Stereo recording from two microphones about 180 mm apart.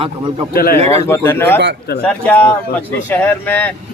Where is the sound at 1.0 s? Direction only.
15° left (ahead or behind).